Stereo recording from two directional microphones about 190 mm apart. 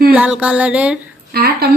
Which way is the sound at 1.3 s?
55° right (ahead or behind).